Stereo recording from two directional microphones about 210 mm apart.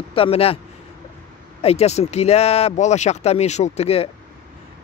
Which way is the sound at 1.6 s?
30° left (ahead or behind).